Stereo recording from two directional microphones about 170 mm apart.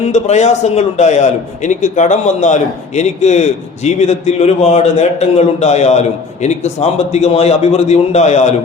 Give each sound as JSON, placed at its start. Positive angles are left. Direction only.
{"t": 0.0, "sound": "a man's voice", "side_deg": 45}